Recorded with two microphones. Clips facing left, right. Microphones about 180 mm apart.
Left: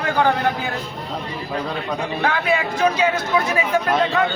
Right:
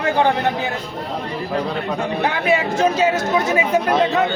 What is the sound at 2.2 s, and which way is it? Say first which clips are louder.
Speech: right 2 dB; 25° right (ahead or behind).